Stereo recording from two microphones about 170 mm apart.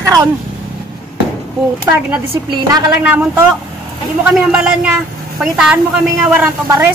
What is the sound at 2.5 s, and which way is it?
Speech, 25° right (ahead or behind).